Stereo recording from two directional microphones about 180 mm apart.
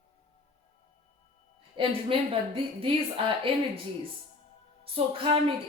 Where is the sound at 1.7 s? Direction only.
30° right (ahead or behind).